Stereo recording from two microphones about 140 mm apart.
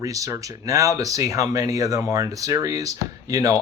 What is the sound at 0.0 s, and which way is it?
Speech, 25° right (ahead or behind).